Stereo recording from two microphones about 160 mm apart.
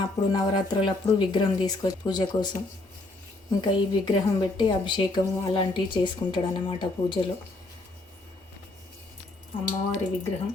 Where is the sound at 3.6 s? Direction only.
30° left (ahead or behind).